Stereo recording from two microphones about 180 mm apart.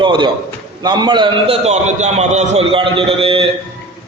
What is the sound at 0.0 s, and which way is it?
A man's voice, 25° right (ahead or behind).